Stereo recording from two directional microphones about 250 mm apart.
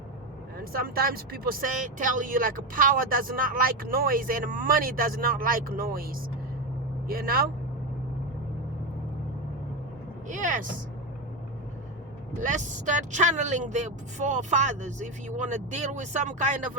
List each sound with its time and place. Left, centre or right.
0.6 s speech: right
10.2 s speech: right
12.4 s speech: right